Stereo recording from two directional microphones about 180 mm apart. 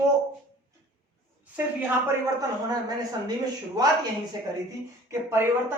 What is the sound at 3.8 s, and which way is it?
Speech, 20° right (ahead or behind).